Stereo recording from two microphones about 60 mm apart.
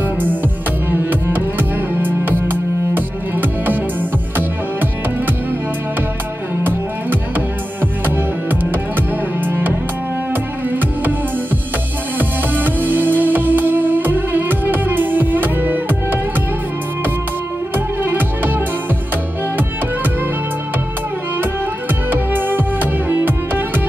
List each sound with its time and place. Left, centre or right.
0.8 s music: right
6.6 s music: right
9.4 s music: right
12.2 s music: right
17.7 s music: right
22.1 s music: right